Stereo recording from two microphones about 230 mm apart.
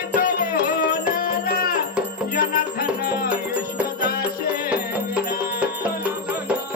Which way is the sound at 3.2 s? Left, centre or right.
Centre.